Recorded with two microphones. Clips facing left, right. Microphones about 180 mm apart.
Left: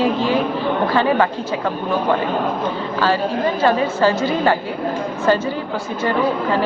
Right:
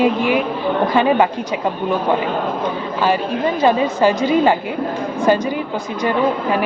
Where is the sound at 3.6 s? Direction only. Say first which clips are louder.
Right 2 dB; 15° right (ahead or behind).